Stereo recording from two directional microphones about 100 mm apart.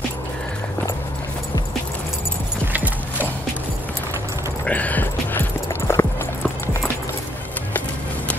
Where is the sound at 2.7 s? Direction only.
15° right (ahead or behind).